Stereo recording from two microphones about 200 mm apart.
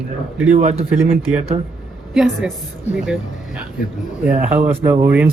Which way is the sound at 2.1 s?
Centre (ahead or behind).